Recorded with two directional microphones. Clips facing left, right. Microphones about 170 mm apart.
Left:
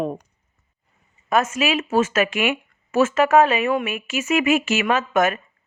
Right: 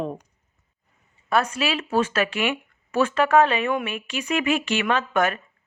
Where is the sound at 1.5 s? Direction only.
10° left (ahead or behind).